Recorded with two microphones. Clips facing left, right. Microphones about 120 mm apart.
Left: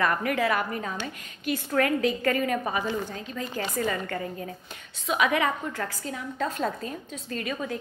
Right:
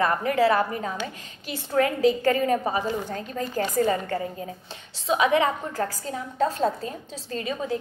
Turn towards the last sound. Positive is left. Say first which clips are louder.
# right 3 dB
turn(degrees=-30)  # may be behind; listen again after turning